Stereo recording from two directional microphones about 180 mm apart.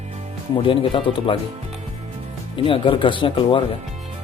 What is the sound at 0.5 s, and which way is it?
Speech, 30° left (ahead or behind).